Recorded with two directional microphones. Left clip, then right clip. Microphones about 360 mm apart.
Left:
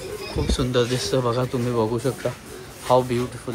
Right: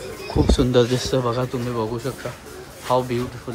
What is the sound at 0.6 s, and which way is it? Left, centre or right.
Speech, centre.